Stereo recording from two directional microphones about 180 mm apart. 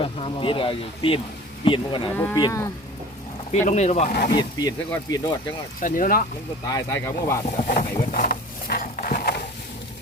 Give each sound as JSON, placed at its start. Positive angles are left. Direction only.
{"t": 0.0, "sound": "speech", "side_deg": 30}
{"t": 2.1, "sound": "speech", "side_deg": 10}
{"t": 3.5, "sound": "speech", "side_deg": 40}
{"t": 4.1, "sound": "speech", "side_deg": 60}
{"t": 4.4, "sound": "speech", "side_deg": 20}
{"t": 5.8, "sound": "speech", "side_deg": 50}
{"t": 6.7, "sound": "speech", "side_deg": 15}
{"t": 7.8, "sound": "a sound", "side_deg": 50}